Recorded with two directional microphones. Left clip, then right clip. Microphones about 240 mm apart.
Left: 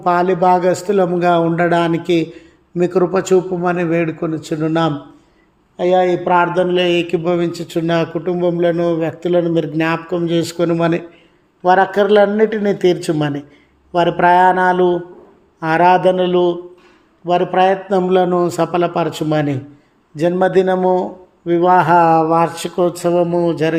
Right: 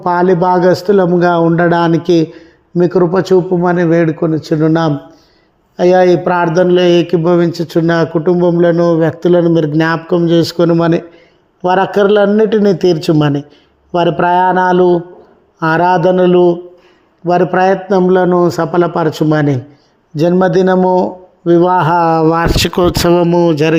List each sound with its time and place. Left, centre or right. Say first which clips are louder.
0.0 s a man's voice: right 3 dB; right